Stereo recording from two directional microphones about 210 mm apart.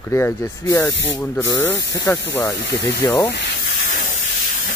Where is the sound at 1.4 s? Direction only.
60° left (ahead or behind).